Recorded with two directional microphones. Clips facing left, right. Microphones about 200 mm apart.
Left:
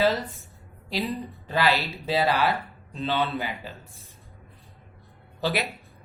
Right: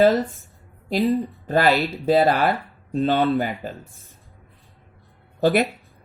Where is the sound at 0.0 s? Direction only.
50° right (ahead or behind).